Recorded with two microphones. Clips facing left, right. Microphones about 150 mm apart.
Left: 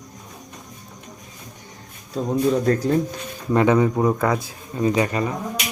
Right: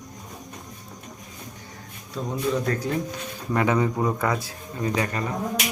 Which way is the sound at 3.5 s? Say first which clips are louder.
Left 5 dB; 20° left (ahead or behind).